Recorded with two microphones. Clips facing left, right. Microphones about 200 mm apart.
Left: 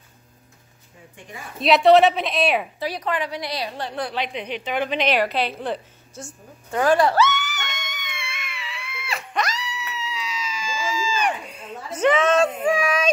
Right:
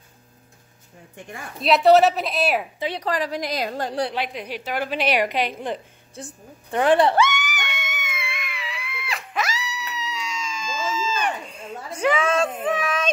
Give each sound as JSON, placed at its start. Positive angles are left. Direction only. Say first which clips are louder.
{"t": 1.6, "sound": "a woman's voice", "louder": "left 1 dB", "side_deg": 0}
{"t": 3.0, "sound": "a woman's voice", "louder": "right 2 dB", "side_deg": -35}
{"t": 4.1, "sound": "a woman's voice", "louder": "left 1 dB", "side_deg": -5}
{"t": 7.3, "sound": "screaming", "louder": "even", "side_deg": -10}
{"t": 12.0, "sound": "a sound", "louder": "left 3 dB", "side_deg": -10}
{"t": 12.6, "sound": "a sound", "louder": "left 3 dB", "side_deg": 10}